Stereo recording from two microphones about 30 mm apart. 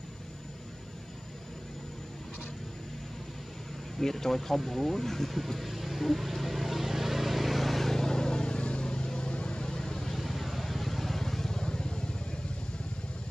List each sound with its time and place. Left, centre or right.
4.0 s speech: centre
5.6 s vehicle: centre
7.9 s vehicle: centre; by 9.7 s left
9.7 s vehicle: left
10.1 s vehicle: centre; by 12.0 s left